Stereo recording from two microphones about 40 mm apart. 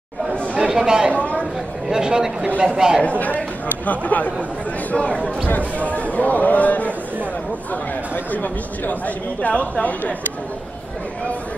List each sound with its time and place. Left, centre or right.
0.6 s speech: centre
1.1 s a sound: left
1.9 s speech: centre
3.0 s speech: left
4.9 s speech: left
8.3 s speech: left